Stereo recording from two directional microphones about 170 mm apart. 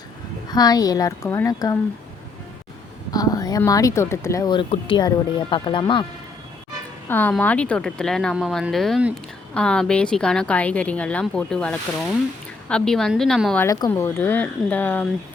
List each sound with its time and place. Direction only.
0.5 s speech: 20° left (ahead or behind)
3.1 s speech: 20° left (ahead or behind)
7.1 s a woman's voice: 10° left (ahead or behind)
13.6 s speech: 15° left (ahead or behind)